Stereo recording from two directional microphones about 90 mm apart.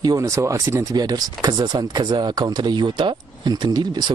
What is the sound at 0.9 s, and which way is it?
Speech, 45° right (ahead or behind).